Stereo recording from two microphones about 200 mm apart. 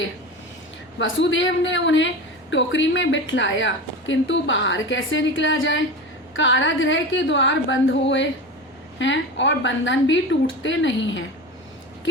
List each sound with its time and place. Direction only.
0.9 s a woman's voice: 70° left (ahead or behind)